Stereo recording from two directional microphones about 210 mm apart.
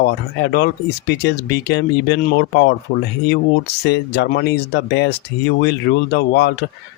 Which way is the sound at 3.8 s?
50° left (ahead or behind).